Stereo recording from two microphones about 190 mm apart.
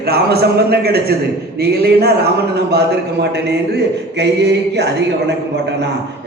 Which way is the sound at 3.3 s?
60° right (ahead or behind).